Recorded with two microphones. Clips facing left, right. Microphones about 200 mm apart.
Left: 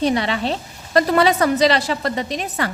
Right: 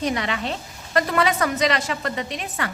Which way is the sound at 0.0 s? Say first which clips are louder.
Left 5 dB; 30° left (ahead or behind).